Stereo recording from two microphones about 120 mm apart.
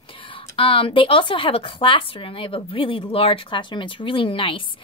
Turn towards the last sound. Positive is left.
turn(degrees=45)  # may be behind; listen again after turning